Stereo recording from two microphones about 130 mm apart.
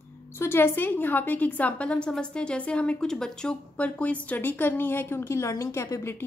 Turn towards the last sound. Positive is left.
turn(degrees=20)  # may be behind; listen again after turning